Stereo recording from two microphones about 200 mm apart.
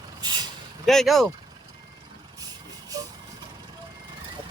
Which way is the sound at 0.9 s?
Centre (ahead or behind).